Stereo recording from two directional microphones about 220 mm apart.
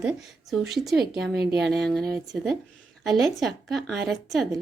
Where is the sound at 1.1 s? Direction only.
50° right (ahead or behind).